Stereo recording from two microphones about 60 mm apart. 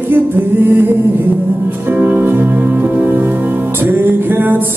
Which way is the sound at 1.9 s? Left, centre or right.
Right.